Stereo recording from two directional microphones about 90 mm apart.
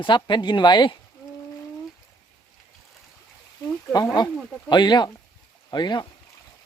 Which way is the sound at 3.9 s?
50° left (ahead or behind).